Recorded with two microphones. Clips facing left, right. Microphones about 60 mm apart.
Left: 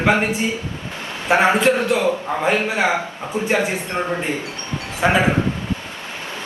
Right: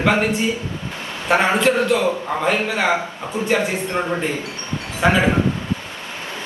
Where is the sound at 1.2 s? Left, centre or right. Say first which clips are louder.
Left 1 dB; left.